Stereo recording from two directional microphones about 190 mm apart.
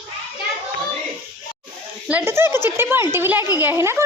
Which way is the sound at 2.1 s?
10° right (ahead or behind).